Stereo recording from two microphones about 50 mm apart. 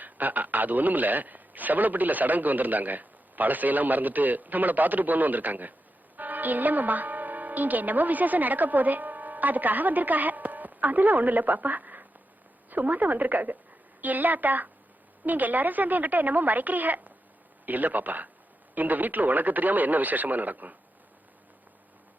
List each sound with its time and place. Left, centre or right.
0.0 s a man's voice: right